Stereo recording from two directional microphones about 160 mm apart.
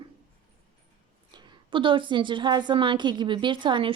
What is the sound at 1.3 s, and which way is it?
A woman's voice, 30° right (ahead or behind).